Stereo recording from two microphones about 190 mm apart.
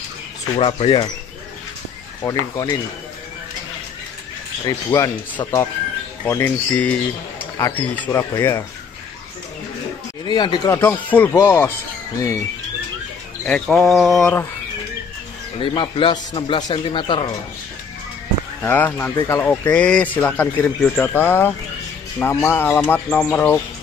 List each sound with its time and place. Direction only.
0.6 s speech: 25° left (ahead or behind)
2.2 s speech: 20° left (ahead or behind)
4.6 s speech: 20° left (ahead or behind)
10.2 s speech: 25° left (ahead or behind)
13.5 s a sound: centre (ahead or behind)
15.6 s speech: 25° left (ahead or behind)
18.6 s speech: 10° left (ahead or behind)